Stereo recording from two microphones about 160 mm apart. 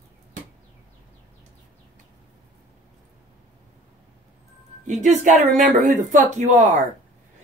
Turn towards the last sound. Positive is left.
turn(degrees=-55)  # may be behind; listen again after turning